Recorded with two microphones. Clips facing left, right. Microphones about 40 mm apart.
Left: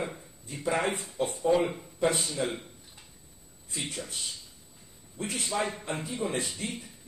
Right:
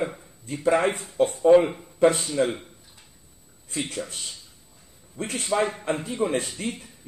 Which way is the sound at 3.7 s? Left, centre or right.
Right.